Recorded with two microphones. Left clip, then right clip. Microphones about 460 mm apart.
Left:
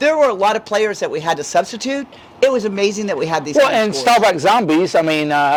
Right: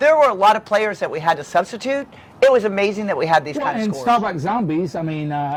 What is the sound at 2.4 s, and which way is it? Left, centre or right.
Speech, right.